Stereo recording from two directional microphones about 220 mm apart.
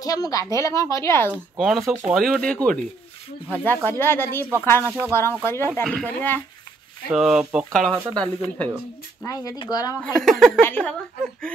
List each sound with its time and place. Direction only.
0.0 s speech: 15° left (ahead or behind)
1.3 s speech: centre (ahead or behind)
7.1 s speech: centre (ahead or behind)
7.9 s speech: 15° right (ahead or behind)
8.4 s speech: centre (ahead or behind)
9.2 s speech: 15° left (ahead or behind)
10.0 s speech: centre (ahead or behind)